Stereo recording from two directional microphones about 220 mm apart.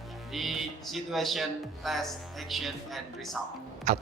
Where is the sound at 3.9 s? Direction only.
30° right (ahead or behind).